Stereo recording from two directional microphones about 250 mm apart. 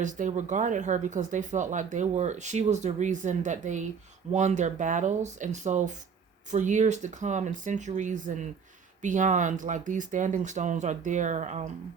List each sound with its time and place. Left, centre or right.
0.0 s speech: right